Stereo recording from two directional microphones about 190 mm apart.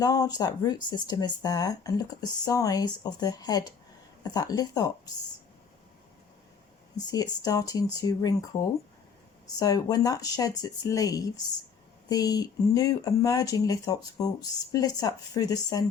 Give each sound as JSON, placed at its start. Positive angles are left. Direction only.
{"t": 0.0, "sound": "speech", "side_deg": 20}
{"t": 6.9, "sound": "speech", "side_deg": 20}
{"t": 9.6, "sound": "speech", "side_deg": 20}